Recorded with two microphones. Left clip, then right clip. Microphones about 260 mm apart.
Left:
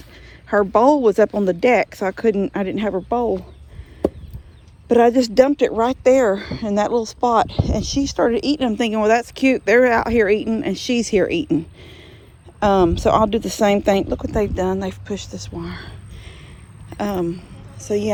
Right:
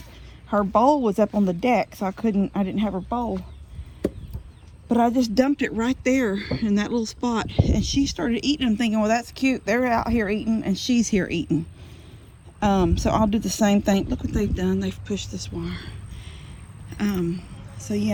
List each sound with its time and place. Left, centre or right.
0.4 s speech: left
4.9 s speech: left
5.5 s speech: centre
8.8 s speech: left
12.5 s speech: left
14.3 s speech: centre
17.0 s speech: centre